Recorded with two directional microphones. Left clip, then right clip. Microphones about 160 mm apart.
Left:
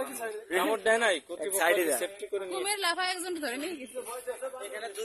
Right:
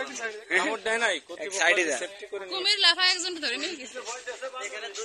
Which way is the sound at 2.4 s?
65° left (ahead or behind).